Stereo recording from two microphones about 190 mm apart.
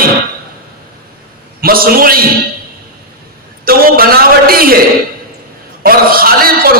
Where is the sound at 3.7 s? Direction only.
50° right (ahead or behind).